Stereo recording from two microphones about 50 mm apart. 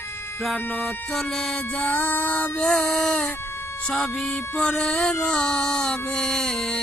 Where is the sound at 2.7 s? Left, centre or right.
Centre.